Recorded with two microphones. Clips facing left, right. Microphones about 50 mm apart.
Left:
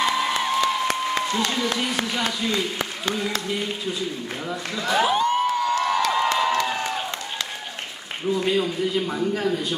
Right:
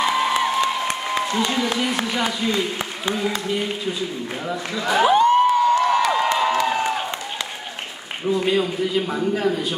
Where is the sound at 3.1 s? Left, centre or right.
Centre.